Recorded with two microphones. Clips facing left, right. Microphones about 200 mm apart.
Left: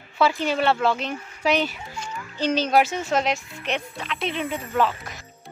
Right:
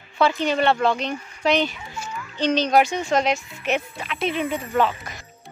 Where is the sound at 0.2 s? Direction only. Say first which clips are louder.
Right 1 dB; 5° left (ahead or behind).